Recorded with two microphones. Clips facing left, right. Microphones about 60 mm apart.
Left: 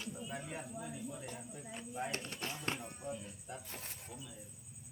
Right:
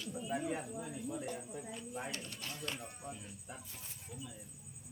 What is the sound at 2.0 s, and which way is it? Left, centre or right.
Speech, left.